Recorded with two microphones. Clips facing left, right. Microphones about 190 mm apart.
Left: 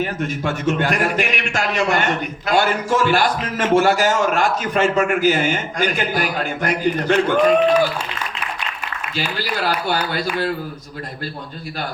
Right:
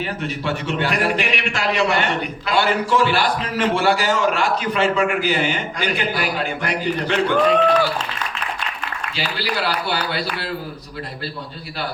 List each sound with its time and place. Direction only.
0.0 s a man's voice: 45° left (ahead or behind)
7.4 s speech: 10° left (ahead or behind)
9.1 s a man's voice: 45° left (ahead or behind)